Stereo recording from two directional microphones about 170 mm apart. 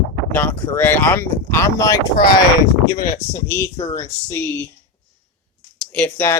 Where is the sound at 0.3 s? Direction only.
10° left (ahead or behind).